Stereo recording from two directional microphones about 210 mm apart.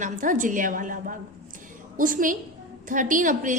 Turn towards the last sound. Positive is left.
turn(degrees=-40)  # may be behind; listen again after turning